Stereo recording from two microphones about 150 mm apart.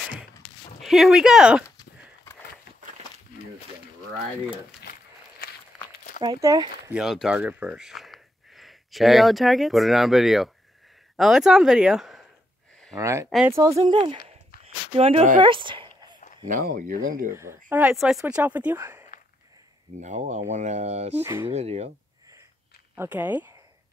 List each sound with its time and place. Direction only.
0.7 s speech: centre (ahead or behind)
5.4 s walk: 80° left
6.2 s speech: 25° right (ahead or behind)
6.9 s speech: 5° right (ahead or behind)
12.9 s speech: 20° right (ahead or behind)
13.8 s speech: 30° right (ahead or behind)
14.6 s a sound: 45° right (ahead or behind)
16.4 s speech: 60° right (ahead or behind)
17.3 s speech: 15° right (ahead or behind)
20.0 s speech: 50° right (ahead or behind)
21.2 s speech: 15° right (ahead or behind)
21.5 s speech: 45° right (ahead or behind)
22.9 s speech: 15° right (ahead or behind)